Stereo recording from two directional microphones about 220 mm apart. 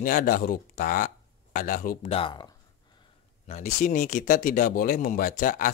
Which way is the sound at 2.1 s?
25° left (ahead or behind).